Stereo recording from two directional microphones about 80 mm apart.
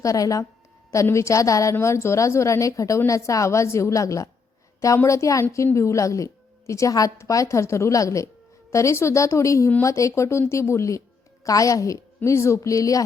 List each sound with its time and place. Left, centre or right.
0.0 s a woman's voice: left